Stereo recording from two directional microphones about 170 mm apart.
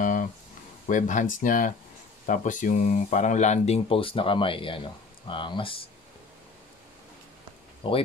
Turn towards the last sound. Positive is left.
turn(degrees=30)  # may be behind; listen again after turning